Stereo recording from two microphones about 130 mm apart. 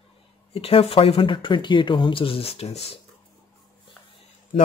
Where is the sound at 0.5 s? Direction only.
45° left (ahead or behind).